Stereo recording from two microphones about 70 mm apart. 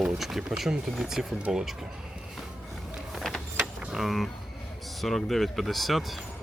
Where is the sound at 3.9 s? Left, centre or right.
Centre.